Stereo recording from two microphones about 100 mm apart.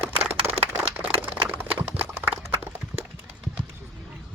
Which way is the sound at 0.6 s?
90° right.